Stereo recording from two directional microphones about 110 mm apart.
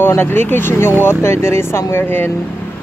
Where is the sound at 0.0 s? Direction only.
20° left (ahead or behind).